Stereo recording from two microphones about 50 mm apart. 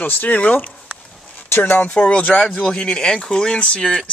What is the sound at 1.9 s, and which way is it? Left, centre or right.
Speech, left.